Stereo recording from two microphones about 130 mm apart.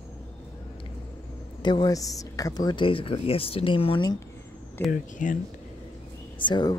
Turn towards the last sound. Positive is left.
turn(degrees=35)  # may be behind; listen again after turning